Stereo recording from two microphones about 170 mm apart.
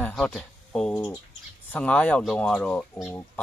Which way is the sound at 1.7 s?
5° left (ahead or behind).